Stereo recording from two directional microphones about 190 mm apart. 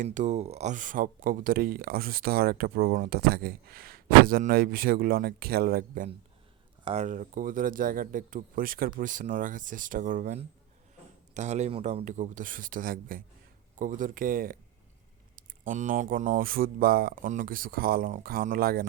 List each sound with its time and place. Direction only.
0.0 s speech: 40° right (ahead or behind)
6.8 s speech: 35° right (ahead or behind)